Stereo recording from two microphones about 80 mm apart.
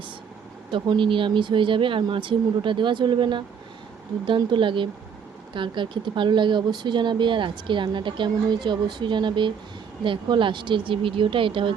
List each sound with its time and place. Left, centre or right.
0.7 s speech: right